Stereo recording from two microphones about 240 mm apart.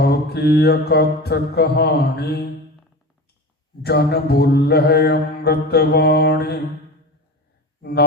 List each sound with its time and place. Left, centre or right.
0.0 s mantra: left
3.8 s mantra: left
7.8 s speech: left